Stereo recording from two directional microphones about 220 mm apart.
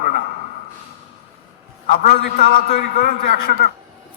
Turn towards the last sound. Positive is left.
turn(degrees=40)  # may be behind; listen again after turning